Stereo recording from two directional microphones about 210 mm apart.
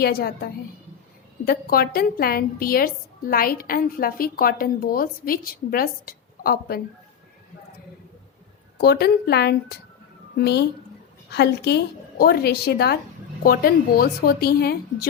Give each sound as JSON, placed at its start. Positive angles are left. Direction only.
{"t": 0.0, "sound": "a woman's voice", "side_deg": 45}
{"t": 1.5, "sound": "a woman's voice", "side_deg": 45}
{"t": 8.8, "sound": "a woman's voice", "side_deg": 50}
{"t": 11.3, "sound": "a woman's voice", "side_deg": 50}